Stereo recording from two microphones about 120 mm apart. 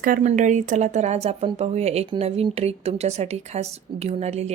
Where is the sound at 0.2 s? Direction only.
90° right.